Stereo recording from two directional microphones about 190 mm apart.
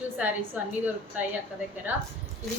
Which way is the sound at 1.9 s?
10° right (ahead or behind).